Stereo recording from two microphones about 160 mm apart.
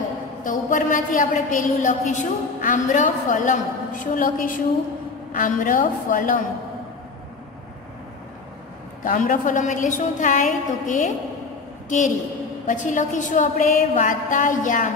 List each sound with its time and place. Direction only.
0.4 s a woman's voice: 55° left (ahead or behind)
9.0 s a woman's voice: 55° left (ahead or behind)
12.6 s a woman's voice: 50° left (ahead or behind)